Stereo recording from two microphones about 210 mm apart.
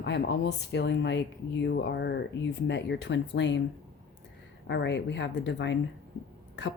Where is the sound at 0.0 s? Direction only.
55° left (ahead or behind).